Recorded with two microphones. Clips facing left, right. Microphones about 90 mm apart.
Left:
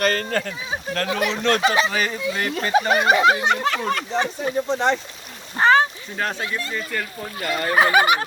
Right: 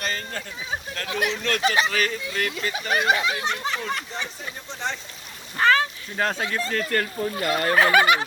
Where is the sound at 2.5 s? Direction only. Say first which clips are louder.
Left 10 dB; 40° left (ahead or behind).